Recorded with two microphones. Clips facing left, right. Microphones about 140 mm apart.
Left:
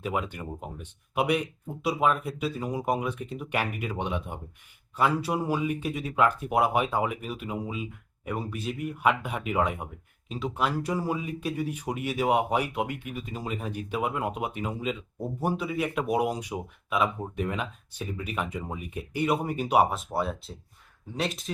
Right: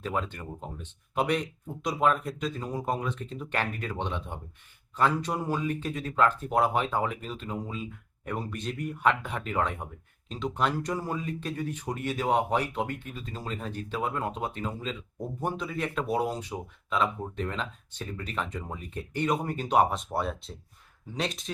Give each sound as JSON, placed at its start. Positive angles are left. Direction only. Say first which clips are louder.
{"t": 0.0, "sound": "speech", "louder": "left 1 dB", "side_deg": 10}